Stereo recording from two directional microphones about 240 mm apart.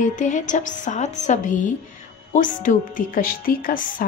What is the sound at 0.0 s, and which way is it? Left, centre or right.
Speech, left.